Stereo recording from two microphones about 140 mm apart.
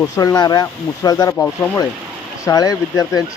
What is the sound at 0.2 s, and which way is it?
Speech, 25° left (ahead or behind).